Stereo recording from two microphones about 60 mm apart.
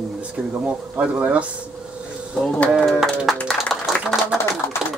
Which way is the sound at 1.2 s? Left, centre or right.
Right.